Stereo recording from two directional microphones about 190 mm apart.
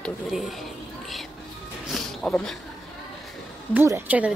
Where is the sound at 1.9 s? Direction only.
5° left (ahead or behind).